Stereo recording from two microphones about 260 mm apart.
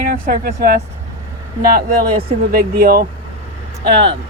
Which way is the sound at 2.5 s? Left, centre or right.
Right.